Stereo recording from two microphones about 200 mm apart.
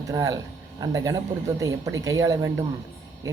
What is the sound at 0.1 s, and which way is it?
Speech, 15° right (ahead or behind).